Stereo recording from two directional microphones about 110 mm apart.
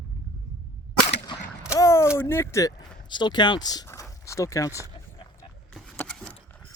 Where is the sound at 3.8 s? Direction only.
25° left (ahead or behind).